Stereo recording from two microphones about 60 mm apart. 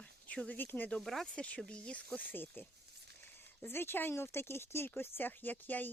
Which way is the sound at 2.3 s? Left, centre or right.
Left.